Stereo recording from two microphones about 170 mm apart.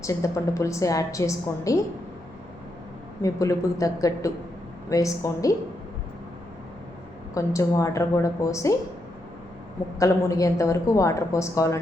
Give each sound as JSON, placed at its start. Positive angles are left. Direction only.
{"t": 0.0, "sound": "a woman's voice", "side_deg": 20}
{"t": 3.2, "sound": "a woman's voice", "side_deg": 20}
{"t": 7.3, "sound": "a woman's voice", "side_deg": 20}
{"t": 10.0, "sound": "a woman's voice", "side_deg": 20}